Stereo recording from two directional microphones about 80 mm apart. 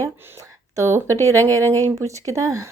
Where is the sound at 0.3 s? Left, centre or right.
Right.